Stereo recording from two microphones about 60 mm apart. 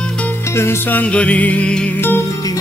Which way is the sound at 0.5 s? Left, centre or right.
Left.